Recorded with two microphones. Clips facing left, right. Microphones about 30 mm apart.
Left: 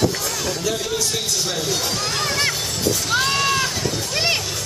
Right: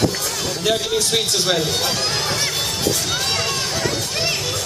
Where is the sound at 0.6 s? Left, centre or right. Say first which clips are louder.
Right 6 dB; right.